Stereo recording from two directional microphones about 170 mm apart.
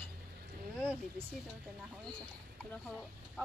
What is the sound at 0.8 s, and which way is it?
Speech, 15° right (ahead or behind).